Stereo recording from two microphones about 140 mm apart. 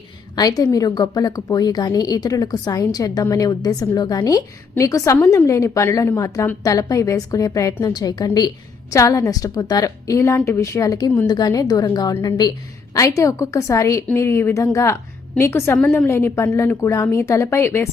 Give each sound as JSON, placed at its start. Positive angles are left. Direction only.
{"t": 0.3, "sound": "a woman's voice", "side_deg": 25}